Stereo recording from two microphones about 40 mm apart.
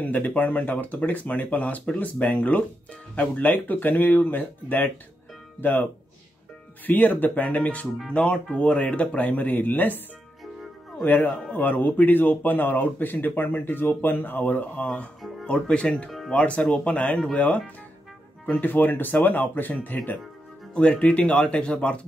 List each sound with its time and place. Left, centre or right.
0.0 s speech: left
6.9 s speech: left
7.4 s speech: left
10.4 s music: centre
11.5 s speech: left
15.4 s speech: left
18.5 s speech: left
20.7 s speech: left